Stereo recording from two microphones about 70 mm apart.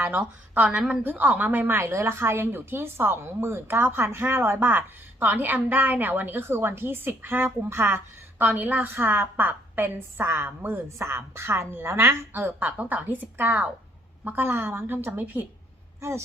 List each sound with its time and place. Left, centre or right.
0.0 s a woman's voice: right
16.0 s a woman's voice: right